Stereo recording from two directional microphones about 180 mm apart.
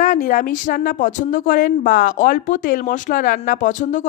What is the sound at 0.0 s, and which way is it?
Speech, 50° left (ahead or behind).